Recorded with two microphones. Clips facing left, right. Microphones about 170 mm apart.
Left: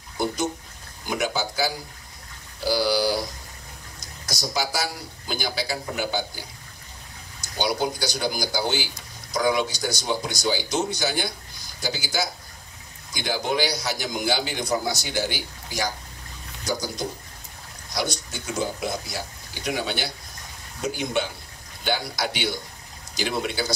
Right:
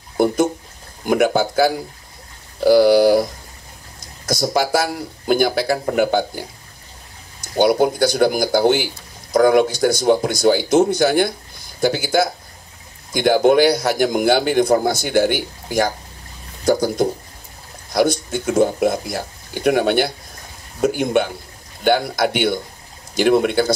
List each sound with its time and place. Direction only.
1.0 s a man's voice: 55° right (ahead or behind)
4.3 s a man's voice: 55° right (ahead or behind)
7.4 s a man's voice: 55° right (ahead or behind)